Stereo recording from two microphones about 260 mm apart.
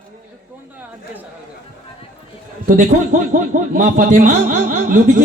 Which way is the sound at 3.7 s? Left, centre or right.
Right.